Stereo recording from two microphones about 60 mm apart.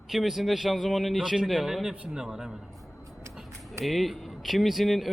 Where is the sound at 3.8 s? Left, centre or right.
Centre.